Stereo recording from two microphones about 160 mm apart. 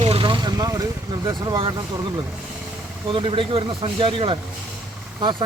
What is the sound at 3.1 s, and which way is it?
Speech, 35° right (ahead or behind).